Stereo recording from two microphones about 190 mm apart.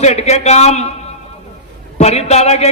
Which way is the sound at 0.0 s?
35° left (ahead or behind).